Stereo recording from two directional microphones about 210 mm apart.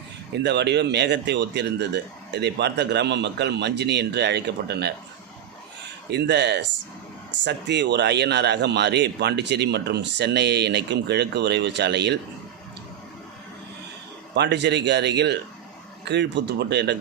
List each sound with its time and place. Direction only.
0.3 s a man's voice: 55° right (ahead or behind)
6.1 s a man's voice: 55° right (ahead or behind)
14.3 s a man's voice: 55° right (ahead or behind)